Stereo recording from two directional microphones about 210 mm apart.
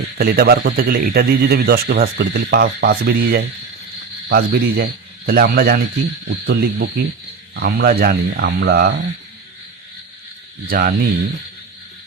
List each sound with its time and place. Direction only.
0.2 s speech: 45° right (ahead or behind)
10.7 s speech: 45° right (ahead or behind)